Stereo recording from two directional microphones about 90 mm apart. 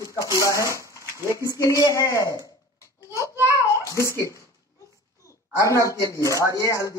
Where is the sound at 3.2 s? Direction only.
30° right (ahead or behind).